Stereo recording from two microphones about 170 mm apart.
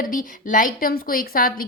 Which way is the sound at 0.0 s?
55° left (ahead or behind).